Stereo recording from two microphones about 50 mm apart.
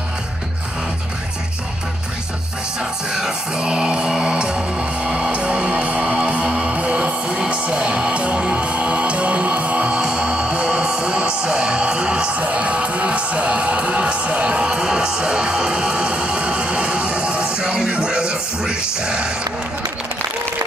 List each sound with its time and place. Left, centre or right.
2.8 s music: centre